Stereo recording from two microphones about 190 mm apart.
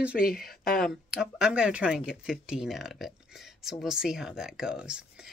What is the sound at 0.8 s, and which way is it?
Speech, 5° right (ahead or behind).